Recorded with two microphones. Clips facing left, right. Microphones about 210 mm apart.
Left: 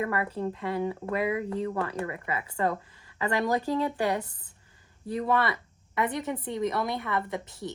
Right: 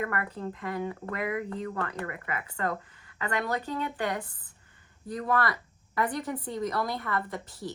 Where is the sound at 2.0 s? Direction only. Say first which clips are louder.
Left 3 dB; 25° left (ahead or behind).